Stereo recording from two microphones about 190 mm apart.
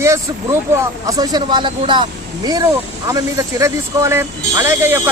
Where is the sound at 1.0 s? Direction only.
20° right (ahead or behind).